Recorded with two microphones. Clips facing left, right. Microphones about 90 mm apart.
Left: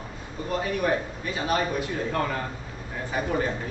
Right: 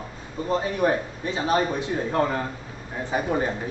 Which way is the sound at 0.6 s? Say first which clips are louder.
Even; 25° right (ahead or behind).